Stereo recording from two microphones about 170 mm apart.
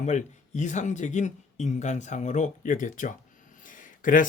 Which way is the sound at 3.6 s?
50° left (ahead or behind).